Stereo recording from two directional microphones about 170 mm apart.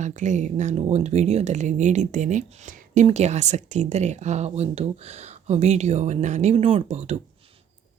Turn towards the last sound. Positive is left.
turn(degrees=-40)  # may be behind; listen again after turning